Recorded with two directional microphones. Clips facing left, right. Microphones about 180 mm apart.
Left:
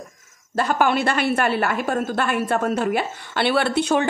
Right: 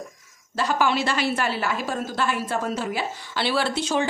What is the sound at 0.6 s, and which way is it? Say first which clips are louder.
A woman's voice: left 3 dB; 55° left (ahead or behind).